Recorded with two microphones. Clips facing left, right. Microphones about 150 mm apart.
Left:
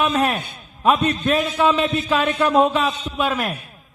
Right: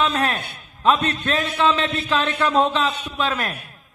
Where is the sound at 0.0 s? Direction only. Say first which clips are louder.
Left 2 dB; 10° left (ahead or behind).